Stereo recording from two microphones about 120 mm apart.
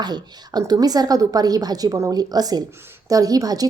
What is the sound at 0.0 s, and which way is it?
A woman's voice, 35° right (ahead or behind).